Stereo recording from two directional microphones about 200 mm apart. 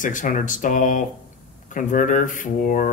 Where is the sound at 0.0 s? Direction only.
40° left (ahead or behind).